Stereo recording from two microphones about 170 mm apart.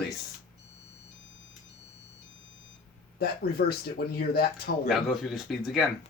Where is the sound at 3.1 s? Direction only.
65° left (ahead or behind).